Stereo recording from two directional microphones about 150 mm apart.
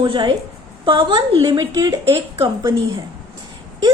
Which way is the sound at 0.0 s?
30° right (ahead or behind).